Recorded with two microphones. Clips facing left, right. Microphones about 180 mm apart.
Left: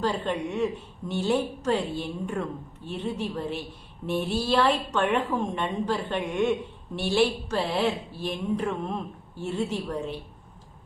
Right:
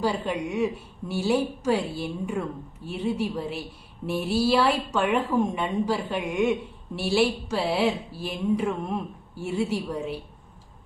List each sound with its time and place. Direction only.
0.0 s a woman's voice: 10° right (ahead or behind)